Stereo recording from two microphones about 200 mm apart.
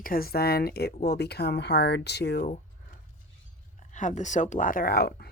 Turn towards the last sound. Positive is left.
turn(degrees=50)  # may be behind; listen again after turning